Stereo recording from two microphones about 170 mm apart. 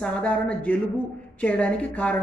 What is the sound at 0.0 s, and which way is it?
Speech, 5° left (ahead or behind).